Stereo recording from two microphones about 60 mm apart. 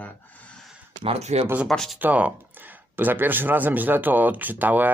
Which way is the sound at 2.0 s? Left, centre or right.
Right.